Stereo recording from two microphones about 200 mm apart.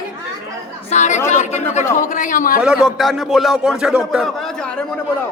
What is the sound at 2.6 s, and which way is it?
A man's voice, centre (ahead or behind).